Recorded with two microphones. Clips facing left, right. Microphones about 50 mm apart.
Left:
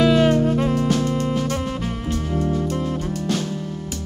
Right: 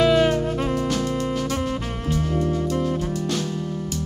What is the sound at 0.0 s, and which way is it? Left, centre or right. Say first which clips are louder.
Music: left 2 dB; centre.